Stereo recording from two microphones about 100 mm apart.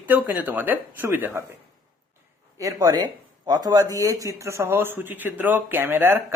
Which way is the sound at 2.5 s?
35° right (ahead or behind).